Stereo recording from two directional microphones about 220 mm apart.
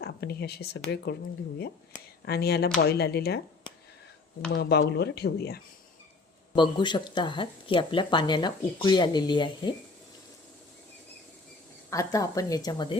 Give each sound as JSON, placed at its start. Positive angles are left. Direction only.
{"t": 0.0, "sound": "speech", "side_deg": 45}
{"t": 2.2, "sound": "speech", "side_deg": 45}
{"t": 4.5, "sound": "speech", "side_deg": 50}
{"t": 6.6, "sound": "speech", "side_deg": 20}
{"t": 11.9, "sound": "speech", "side_deg": 15}